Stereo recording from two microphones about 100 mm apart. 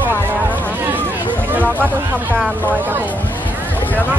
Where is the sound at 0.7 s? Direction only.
20° right (ahead or behind).